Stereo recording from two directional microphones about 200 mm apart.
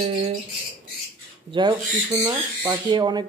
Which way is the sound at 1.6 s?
20° right (ahead or behind).